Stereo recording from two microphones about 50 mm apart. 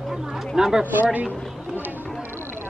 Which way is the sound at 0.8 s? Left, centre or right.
Right.